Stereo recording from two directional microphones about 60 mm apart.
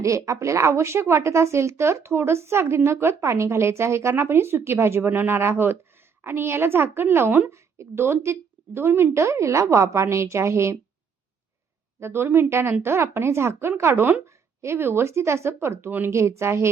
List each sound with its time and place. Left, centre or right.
0.0 s a woman's voice: right
7.5 s speech: right
11.9 s speech: right
14.3 s speech: right